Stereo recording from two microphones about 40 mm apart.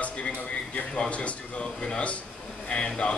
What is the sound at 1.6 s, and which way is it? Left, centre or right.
Speech, left.